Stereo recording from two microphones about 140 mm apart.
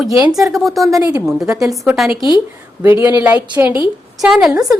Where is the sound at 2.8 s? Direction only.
20° right (ahead or behind).